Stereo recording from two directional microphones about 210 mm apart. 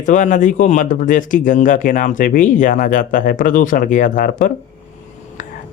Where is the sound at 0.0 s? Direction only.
35° left (ahead or behind).